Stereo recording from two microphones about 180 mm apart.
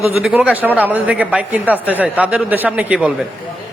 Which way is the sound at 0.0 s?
5° right (ahead or behind).